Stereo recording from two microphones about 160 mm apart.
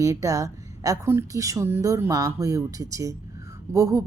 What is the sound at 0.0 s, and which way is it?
A woman's voice, 20° right (ahead or behind).